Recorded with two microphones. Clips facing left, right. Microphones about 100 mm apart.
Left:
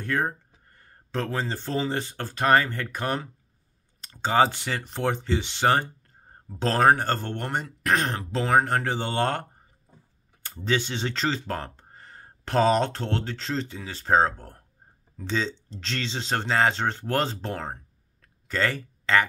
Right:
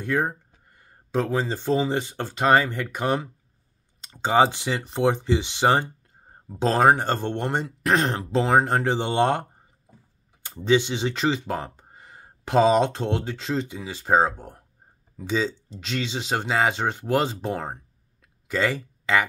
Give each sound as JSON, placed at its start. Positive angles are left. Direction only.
{"t": 0.0, "sound": "speech", "side_deg": -15}
{"t": 18.2, "sound": "a sound", "side_deg": -15}
{"t": 19.1, "sound": "speech", "side_deg": -15}